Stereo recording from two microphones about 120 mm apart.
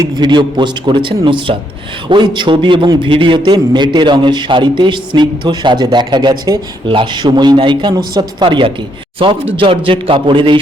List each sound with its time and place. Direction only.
0.0 s a man's voice: 40° right (ahead or behind)